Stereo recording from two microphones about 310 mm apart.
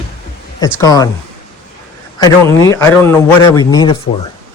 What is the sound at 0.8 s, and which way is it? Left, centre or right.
Speech, centre.